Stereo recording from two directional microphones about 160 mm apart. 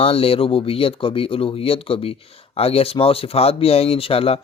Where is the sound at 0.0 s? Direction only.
35° left (ahead or behind).